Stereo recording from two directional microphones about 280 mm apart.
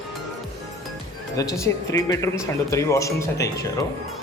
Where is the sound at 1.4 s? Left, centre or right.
Centre.